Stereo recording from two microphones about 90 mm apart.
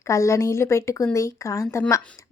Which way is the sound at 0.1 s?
35° left (ahead or behind).